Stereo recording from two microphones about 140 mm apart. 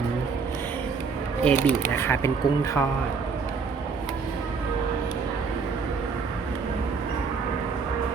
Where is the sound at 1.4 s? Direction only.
15° left (ahead or behind).